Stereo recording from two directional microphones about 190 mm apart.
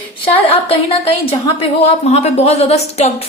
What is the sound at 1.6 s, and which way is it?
A woman's voice, 35° left (ahead or behind).